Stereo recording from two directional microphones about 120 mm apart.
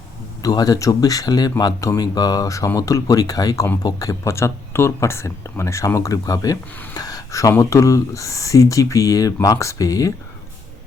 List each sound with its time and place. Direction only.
0.4 s speech: 30° left (ahead or behind)